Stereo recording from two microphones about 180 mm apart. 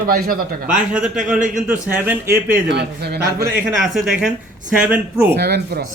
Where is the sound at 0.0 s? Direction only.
55° right (ahead or behind).